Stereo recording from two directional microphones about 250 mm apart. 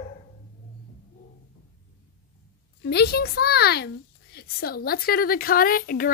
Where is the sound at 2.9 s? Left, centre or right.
Left.